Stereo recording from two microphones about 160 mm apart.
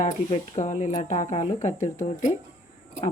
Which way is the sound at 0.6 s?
50° left (ahead or behind).